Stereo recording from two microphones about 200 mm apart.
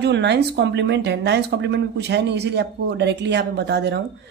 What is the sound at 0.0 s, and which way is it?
Speech, 60° right (ahead or behind).